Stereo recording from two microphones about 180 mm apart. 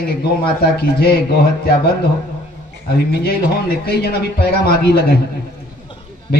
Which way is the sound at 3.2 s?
65° left (ahead or behind).